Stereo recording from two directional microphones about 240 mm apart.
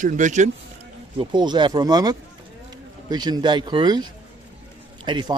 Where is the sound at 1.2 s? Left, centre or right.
Centre.